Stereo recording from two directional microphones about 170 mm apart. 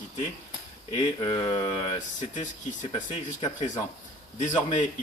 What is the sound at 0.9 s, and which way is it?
Speech, 30° left (ahead or behind).